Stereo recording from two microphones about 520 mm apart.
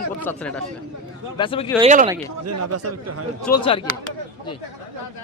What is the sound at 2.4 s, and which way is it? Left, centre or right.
Speech, right.